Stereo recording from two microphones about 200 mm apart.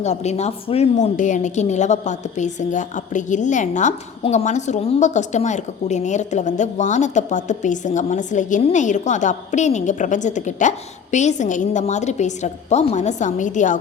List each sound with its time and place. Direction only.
0.0 s a woman's voice: 35° left (ahead or behind)